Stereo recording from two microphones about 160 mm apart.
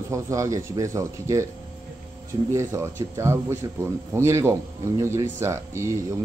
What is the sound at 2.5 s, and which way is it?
A man's voice, 20° right (ahead or behind).